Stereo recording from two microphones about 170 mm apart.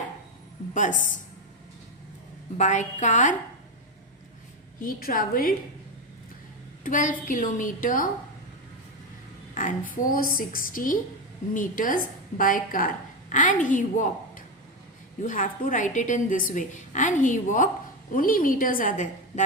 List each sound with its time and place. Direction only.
0.7 s speech: 50° left (ahead or behind)
2.6 s a woman's voice: 45° left (ahead or behind)
4.8 s a woman's voice: 60° left (ahead or behind)
6.8 s a woman's voice: 50° left (ahead or behind)
9.6 s a woman's voice: 50° left (ahead or behind)